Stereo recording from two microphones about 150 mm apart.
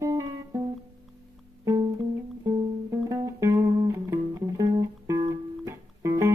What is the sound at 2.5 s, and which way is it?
Music, 25° right (ahead or behind).